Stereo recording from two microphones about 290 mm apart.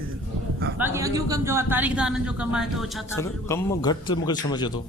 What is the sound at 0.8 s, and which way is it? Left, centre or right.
Speech, centre.